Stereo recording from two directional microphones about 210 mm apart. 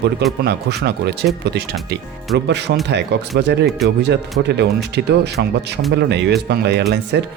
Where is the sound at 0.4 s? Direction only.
55° right (ahead or behind).